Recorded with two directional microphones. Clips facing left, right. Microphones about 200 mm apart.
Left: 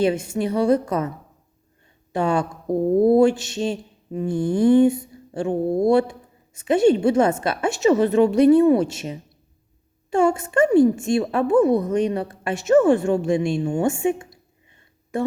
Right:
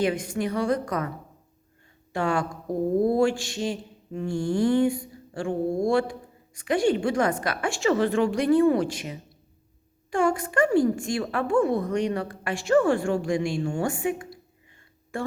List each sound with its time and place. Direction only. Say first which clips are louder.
0.0 s speech: left 4 dB; 25° left (ahead or behind)
2.1 s speech: left 4 dB; 20° left (ahead or behind)